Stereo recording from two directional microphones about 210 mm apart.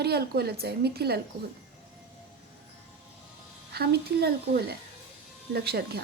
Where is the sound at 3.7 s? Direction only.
50° right (ahead or behind).